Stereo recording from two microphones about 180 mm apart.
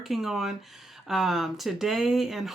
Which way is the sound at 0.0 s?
Centre (ahead or behind).